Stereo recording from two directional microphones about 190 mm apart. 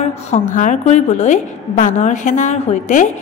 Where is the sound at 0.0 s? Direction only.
40° left (ahead or behind).